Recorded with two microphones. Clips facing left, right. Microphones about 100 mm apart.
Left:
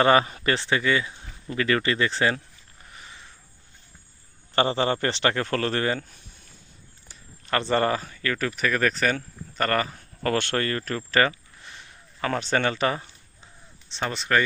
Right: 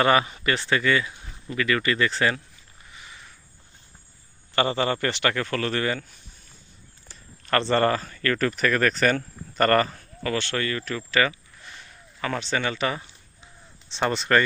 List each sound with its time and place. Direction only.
0.0 s a man's voice: 30° left (ahead or behind)
0.6 s speech: 20° left (ahead or behind)
2.9 s a sound: 40° left (ahead or behind)
4.5 s a man's voice: 30° left (ahead or behind)
7.1 s speech: 10° left (ahead or behind)
10.2 s speech: 50° left (ahead or behind); by 13.5 s 35° left (ahead or behind)
13.8 s speech: centre (ahead or behind)